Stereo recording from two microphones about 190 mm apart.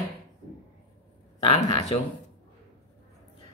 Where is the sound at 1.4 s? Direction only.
30° left (ahead or behind).